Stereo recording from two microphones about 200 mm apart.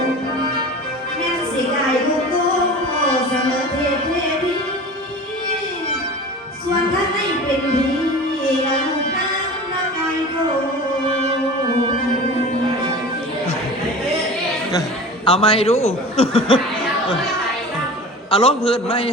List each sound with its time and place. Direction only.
14.7 s a sound: 20° left (ahead or behind)
16.1 s chuckle: 25° left (ahead or behind)
18.3 s a man's voice: 25° left (ahead or behind)
18.7 s chuckle: 25° left (ahead or behind)